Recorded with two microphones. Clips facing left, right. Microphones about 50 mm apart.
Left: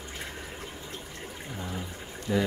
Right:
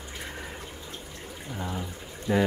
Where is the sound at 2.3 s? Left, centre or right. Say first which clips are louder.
Right 3 dB; right.